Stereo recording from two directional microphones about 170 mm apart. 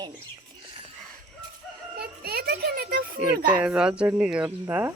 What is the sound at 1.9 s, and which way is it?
A child's voice, 65° right (ahead or behind).